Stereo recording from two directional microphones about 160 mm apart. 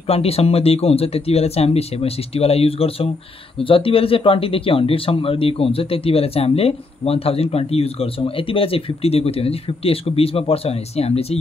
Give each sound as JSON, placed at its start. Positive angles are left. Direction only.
{"t": 0.0, "sound": "speech", "side_deg": 40}